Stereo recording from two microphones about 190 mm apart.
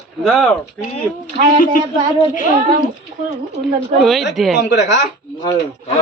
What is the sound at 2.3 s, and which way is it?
Speech, 45° left (ahead or behind).